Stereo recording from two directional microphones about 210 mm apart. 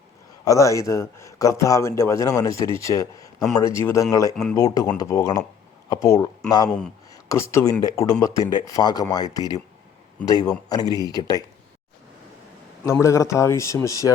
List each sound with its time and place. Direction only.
0.4 s a man's voice: 15° left (ahead or behind)
6.7 s speech: 5° left (ahead or behind)
7.1 s a man's voice: 15° left (ahead or behind)
12.8 s a man's voice: 15° left (ahead or behind)